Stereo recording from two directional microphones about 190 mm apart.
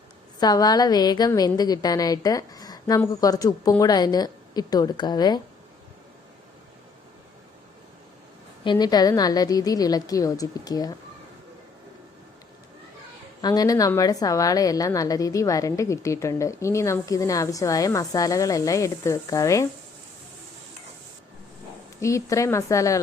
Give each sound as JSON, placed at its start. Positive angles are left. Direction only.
{"t": 0.3, "sound": "a woman's voice", "side_deg": 20}
{"t": 8.6, "sound": "a woman's voice", "side_deg": 20}
{"t": 13.4, "sound": "a woman's voice", "side_deg": 20}
{"t": 22.0, "sound": "a woman's voice", "side_deg": 15}